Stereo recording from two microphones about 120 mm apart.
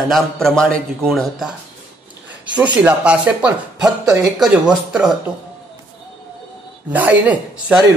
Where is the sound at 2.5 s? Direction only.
10° right (ahead or behind).